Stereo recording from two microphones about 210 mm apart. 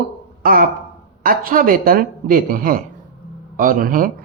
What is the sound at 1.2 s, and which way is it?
Speech, 40° right (ahead or behind).